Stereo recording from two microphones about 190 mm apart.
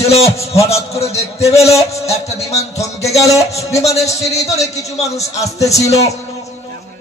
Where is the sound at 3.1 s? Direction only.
15° left (ahead or behind).